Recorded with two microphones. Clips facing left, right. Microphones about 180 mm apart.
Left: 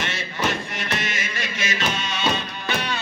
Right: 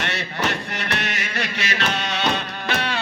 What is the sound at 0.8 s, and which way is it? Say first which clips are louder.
Music: right 1 dB; 65° right (ahead or behind).